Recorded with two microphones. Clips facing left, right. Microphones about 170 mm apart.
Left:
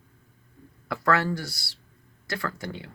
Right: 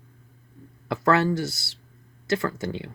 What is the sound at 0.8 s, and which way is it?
Speech, 25° right (ahead or behind).